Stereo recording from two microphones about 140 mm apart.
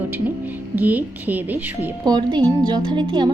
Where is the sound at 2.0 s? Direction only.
30° right (ahead or behind).